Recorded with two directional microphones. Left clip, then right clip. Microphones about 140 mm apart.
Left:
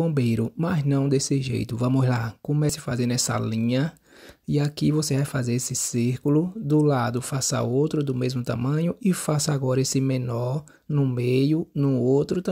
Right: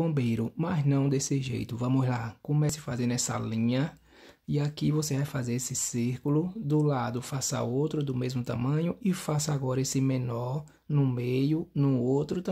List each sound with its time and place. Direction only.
0.1 s speech: 35° left (ahead or behind)
10.9 s speech: 25° left (ahead or behind)
11.1 s speech: 40° left (ahead or behind)
11.7 s speech: 15° left (ahead or behind)
12.0 s speech: 35° left (ahead or behind)